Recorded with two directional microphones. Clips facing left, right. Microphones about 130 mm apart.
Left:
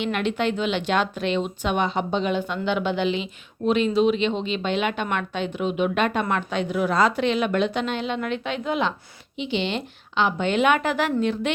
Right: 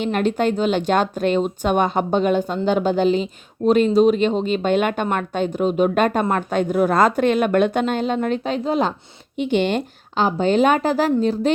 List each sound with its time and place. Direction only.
0.0 s a woman's voice: 40° right (ahead or behind)
9.4 s a woman's voice: 50° right (ahead or behind)